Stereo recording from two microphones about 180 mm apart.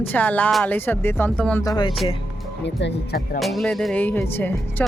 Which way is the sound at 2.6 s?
65° left (ahead or behind).